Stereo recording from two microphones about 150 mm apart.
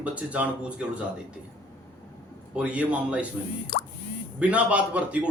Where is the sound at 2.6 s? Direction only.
10° right (ahead or behind).